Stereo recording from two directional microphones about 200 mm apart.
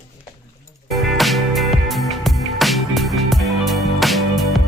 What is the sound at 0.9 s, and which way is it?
Music, centre (ahead or behind).